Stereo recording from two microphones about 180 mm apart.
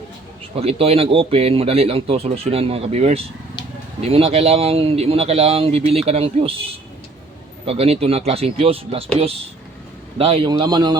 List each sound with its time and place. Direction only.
0.5 s speech: 35° right (ahead or behind)
7.6 s a man's voice: 35° right (ahead or behind)